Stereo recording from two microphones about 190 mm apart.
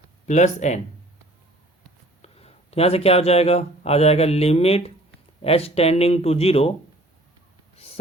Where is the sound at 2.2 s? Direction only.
35° left (ahead or behind).